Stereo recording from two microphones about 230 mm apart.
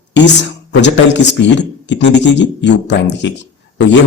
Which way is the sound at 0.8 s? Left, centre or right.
Left.